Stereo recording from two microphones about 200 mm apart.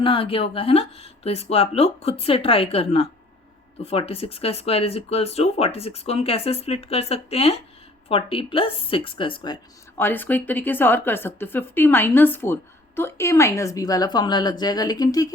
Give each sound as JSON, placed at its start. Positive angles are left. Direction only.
{"t": 0.0, "sound": "speech", "side_deg": 25}
{"t": 10.0, "sound": "a woman's voice", "side_deg": 10}